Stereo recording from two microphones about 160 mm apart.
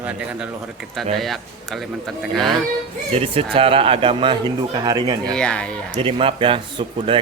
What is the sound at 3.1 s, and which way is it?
Speech, 35° right (ahead or behind).